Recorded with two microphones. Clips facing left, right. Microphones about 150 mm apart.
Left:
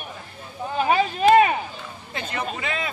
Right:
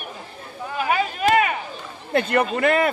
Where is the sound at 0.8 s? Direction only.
30° left (ahead or behind).